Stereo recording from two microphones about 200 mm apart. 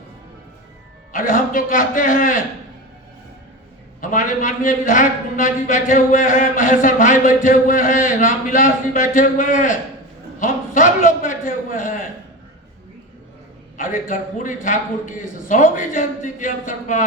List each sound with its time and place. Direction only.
1.1 s a man's voice: 45° left (ahead or behind)
4.0 s a man's voice: 40° left (ahead or behind)
13.7 s a man's voice: 40° left (ahead or behind)